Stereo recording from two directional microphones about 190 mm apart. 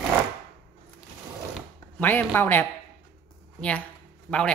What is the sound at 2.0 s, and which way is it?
Speech, 10° left (ahead or behind).